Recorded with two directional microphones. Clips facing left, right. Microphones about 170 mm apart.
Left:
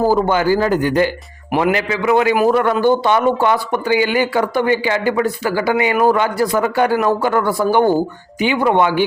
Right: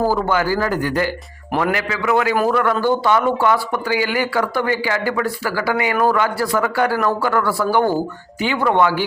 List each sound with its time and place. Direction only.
0.0 s speech: 20° left (ahead or behind)